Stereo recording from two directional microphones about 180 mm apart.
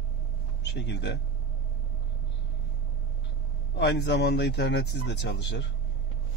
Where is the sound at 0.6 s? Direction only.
75° left (ahead or behind).